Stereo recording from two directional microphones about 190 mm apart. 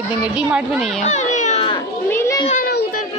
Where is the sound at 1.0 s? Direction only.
40° left (ahead or behind).